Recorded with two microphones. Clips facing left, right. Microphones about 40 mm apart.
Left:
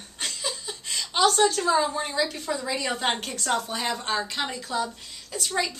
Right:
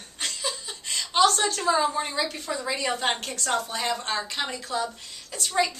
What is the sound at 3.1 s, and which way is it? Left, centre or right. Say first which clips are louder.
A woman's voice: even; centre.